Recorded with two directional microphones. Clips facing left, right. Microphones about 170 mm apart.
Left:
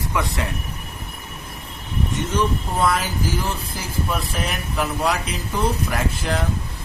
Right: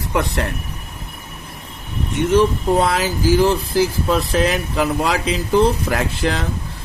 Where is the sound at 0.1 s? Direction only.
60° right (ahead or behind).